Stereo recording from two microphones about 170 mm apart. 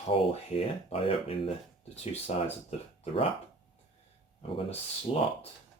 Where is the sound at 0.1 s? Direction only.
35° left (ahead or behind).